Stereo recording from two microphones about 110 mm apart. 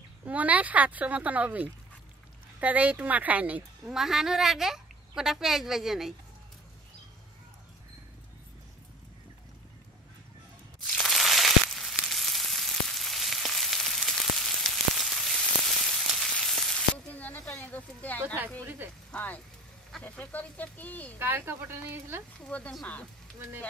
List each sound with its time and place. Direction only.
0.2 s speech: 15° right (ahead or behind)
3.9 s speech: 5° right (ahead or behind)
10.8 s crushing: 5° left (ahead or behind)
15.9 s frying: centre (ahead or behind)
17.1 s a sound: 15° left (ahead or behind)
18.2 s a sound: 20° right (ahead or behind)
19.1 s vehicle: 15° left (ahead or behind)
20.0 s a sound: 15° left (ahead or behind)
21.2 s speech: 20° right (ahead or behind)
22.4 s speech: 10° left (ahead or behind)